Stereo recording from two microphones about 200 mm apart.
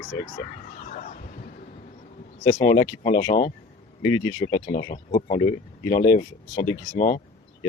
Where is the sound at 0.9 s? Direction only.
40° left (ahead or behind).